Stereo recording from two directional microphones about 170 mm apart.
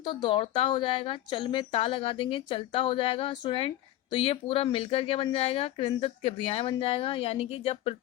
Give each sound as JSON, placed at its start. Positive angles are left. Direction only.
{"t": 0.0, "sound": "speech", "side_deg": 25}